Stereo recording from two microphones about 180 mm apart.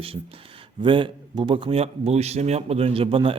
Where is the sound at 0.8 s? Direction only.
25° right (ahead or behind).